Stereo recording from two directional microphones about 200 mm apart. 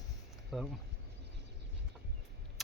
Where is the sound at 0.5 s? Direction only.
Centre (ahead or behind).